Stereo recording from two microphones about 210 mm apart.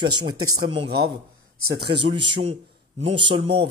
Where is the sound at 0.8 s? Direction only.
50° right (ahead or behind).